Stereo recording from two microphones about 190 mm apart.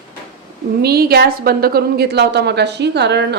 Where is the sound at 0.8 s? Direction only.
55° right (ahead or behind).